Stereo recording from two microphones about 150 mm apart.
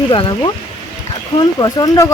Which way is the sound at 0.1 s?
30° left (ahead or behind).